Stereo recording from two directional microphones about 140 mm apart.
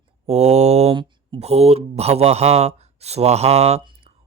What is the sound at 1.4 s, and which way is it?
Speech, 50° right (ahead or behind).